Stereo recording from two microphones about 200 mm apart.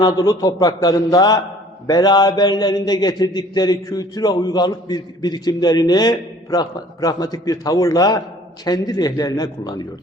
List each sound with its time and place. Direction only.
0.0 s a man's voice: 20° left (ahead or behind)